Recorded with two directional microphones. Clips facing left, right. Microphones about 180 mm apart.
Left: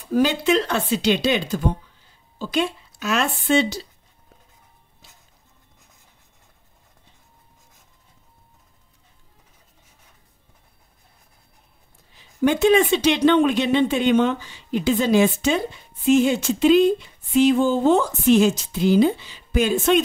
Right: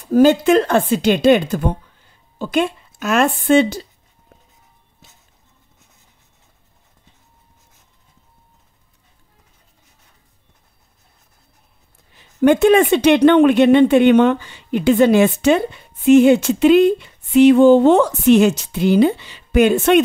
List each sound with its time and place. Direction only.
0.1 s speech: 45° right (ahead or behind)
12.1 s speech: 55° right (ahead or behind)